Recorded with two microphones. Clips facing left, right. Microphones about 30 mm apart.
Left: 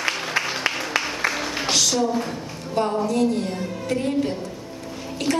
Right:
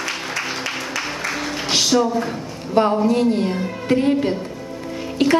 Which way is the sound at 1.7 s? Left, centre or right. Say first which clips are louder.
Right 4 dB; right.